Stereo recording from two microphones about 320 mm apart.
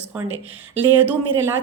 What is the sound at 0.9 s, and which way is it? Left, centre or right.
Speech, centre.